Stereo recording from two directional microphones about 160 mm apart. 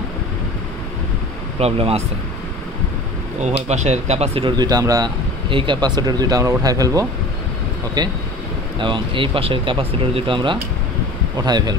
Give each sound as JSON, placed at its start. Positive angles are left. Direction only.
{"t": 1.6, "sound": "speech", "side_deg": -40}
{"t": 3.6, "sound": "speech", "side_deg": -45}
{"t": 8.7, "sound": "speech", "side_deg": -30}